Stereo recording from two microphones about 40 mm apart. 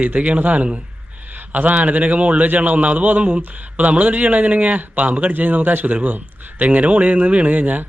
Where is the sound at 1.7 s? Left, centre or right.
Right.